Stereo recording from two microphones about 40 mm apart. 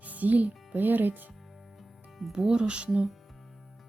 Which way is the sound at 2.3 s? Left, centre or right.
Centre.